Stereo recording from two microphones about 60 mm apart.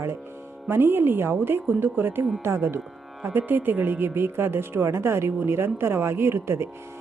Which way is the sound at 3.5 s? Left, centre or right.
Right.